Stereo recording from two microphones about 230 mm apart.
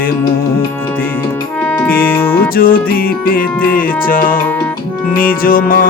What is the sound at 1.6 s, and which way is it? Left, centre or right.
Music, centre.